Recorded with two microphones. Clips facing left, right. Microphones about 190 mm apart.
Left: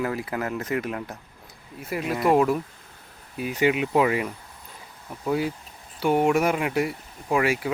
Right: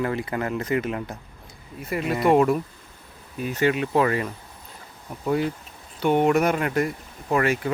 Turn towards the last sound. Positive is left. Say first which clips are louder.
# right 1 dB
turn(degrees=5)  # may be behind; listen again after turning